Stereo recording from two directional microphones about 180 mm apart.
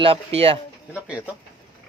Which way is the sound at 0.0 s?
30° right (ahead or behind).